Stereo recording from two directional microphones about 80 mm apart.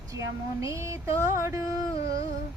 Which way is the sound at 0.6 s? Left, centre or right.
Right.